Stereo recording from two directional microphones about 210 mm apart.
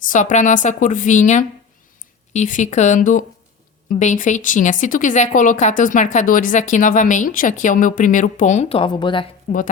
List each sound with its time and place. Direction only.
0.0 s speech: 40° left (ahead or behind); by 9.2 s 20° left (ahead or behind)